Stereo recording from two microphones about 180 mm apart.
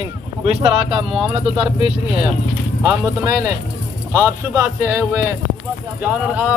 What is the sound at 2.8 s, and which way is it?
Speech, 15° right (ahead or behind).